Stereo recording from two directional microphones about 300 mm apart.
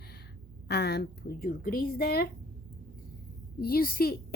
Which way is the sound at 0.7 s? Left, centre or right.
Left.